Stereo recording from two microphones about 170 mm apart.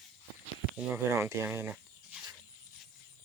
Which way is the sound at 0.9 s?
15° right (ahead or behind).